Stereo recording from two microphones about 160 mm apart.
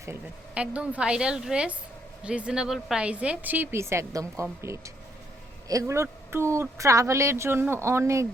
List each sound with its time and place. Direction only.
0.0 s speech: 10° right (ahead or behind)
5.6 s speech: 20° right (ahead or behind)